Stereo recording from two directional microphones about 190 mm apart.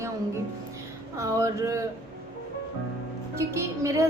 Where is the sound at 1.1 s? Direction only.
15° right (ahead or behind).